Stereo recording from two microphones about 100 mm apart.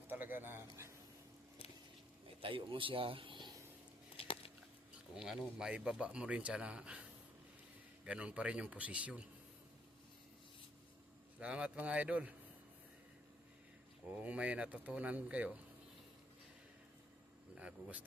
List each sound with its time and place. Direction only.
0.1 s a sound: 20° right (ahead or behind)
2.2 s speech: 60° right (ahead or behind)
4.2 s a sound: 70° left (ahead or behind)
5.1 s speech: 5° right (ahead or behind)
8.0 s speech: 10° right (ahead or behind)
11.3 s speech: 10° right (ahead or behind)
14.2 s speech: 15° right (ahead or behind)
17.5 s speech: 10° right (ahead or behind)